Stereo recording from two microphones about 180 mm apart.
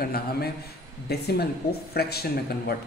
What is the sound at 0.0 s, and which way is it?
A man's voice, 60° left (ahead or behind).